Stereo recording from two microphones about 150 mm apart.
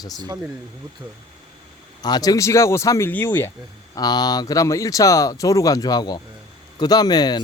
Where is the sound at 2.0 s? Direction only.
25° left (ahead or behind).